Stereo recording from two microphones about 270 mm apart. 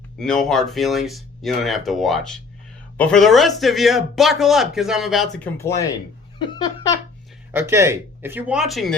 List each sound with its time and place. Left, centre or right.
0.2 s speech: centre
5.5 s speech: centre
6.4 s laughter: centre
7.5 s speech: centre